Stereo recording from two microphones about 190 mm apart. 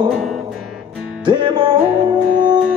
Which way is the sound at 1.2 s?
25° right (ahead or behind).